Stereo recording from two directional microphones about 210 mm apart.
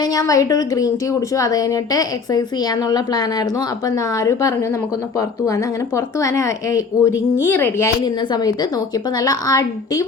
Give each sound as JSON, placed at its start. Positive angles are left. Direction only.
{"t": 0.0, "sound": "a woman's voice", "side_deg": 15}